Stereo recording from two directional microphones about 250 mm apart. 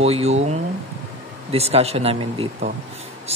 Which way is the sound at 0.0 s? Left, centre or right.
Right.